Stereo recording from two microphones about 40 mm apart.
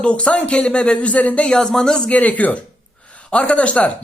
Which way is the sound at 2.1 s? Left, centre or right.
Left.